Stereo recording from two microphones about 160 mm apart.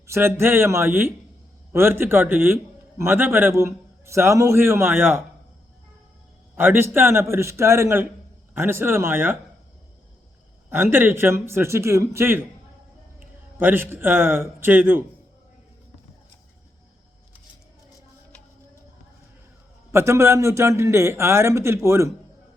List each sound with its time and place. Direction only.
0.1 s a man's voice: 15° right (ahead or behind)
6.6 s a man's voice: 15° right (ahead or behind)
10.7 s a man's voice: 15° right (ahead or behind)
13.6 s a man's voice: 15° right (ahead or behind)
19.9 s a man's voice: 15° right (ahead or behind)